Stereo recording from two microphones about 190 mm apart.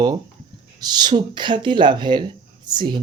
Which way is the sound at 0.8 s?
20° right (ahead or behind).